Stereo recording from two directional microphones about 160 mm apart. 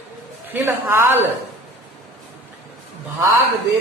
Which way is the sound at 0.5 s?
15° right (ahead or behind).